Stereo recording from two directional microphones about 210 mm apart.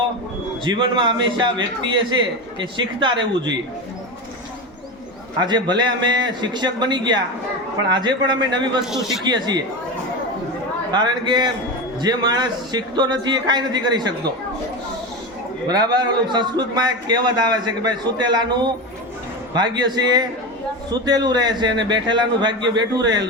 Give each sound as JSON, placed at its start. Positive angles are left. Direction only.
{"t": 0.6, "sound": "a man's voice", "side_deg": -20}
{"t": 2.6, "sound": "a man's voice", "side_deg": -20}
{"t": 5.4, "sound": "a man's voice", "side_deg": -20}
{"t": 8.9, "sound": "speech", "side_deg": 0}
{"t": 9.2, "sound": "a man's voice", "side_deg": -20}
{"t": 10.9, "sound": "a man's voice", "side_deg": -20}
{"t": 15.6, "sound": "a man's voice", "side_deg": -20}
{"t": 20.9, "sound": "a man's voice", "side_deg": -20}